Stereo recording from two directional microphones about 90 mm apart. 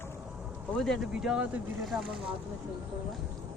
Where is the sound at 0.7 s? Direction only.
5° left (ahead or behind).